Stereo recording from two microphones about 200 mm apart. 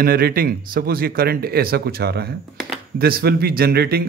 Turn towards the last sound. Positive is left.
turn(degrees=-50)  # may be behind; listen again after turning